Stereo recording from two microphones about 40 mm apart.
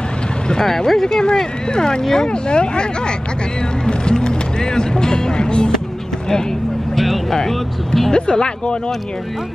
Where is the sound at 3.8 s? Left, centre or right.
Centre.